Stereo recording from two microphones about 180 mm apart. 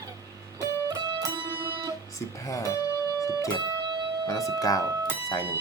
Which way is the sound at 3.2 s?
20° left (ahead or behind).